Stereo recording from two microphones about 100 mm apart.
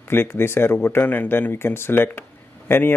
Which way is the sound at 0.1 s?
25° left (ahead or behind).